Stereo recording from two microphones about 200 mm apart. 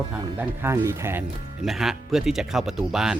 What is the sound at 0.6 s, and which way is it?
Speech, 15° right (ahead or behind).